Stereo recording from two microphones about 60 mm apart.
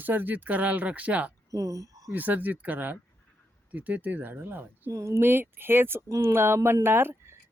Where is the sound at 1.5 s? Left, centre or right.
Right.